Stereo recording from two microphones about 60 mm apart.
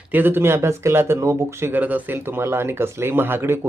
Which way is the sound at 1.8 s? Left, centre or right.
Right.